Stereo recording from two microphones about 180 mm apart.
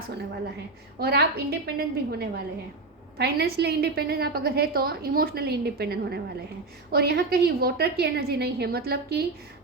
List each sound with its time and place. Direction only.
0.9 s a woman's voice: 60° right (ahead or behind)